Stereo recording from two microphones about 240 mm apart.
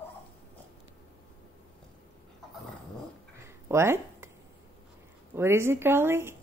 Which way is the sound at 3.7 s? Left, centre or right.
Centre.